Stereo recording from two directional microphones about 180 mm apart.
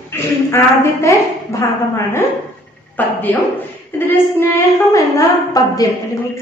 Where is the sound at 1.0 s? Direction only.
15° left (ahead or behind).